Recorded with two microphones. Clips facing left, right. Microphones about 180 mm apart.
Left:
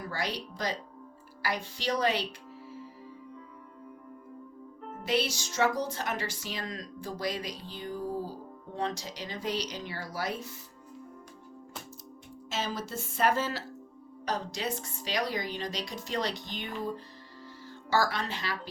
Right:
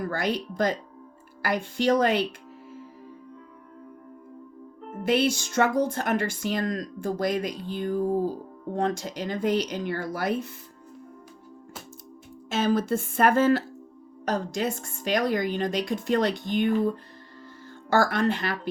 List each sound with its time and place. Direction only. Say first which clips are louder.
0.0 s speech: right 7 dB; 50° right (ahead or behind)
5.0 s speech: right 7 dB; 55° right (ahead or behind)
12.5 s speech: right 11 dB; 55° right (ahead or behind)
17.9 s speech: right 7 dB; 55° right (ahead or behind)